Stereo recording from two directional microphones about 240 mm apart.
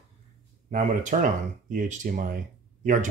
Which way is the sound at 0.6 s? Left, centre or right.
Right.